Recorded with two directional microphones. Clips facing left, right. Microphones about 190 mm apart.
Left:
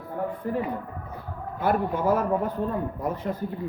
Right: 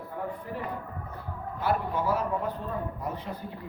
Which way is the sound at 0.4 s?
50° left (ahead or behind).